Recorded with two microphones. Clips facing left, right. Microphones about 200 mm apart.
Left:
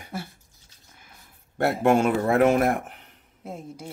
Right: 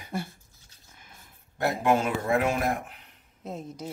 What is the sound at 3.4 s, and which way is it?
Speech, 10° left (ahead or behind).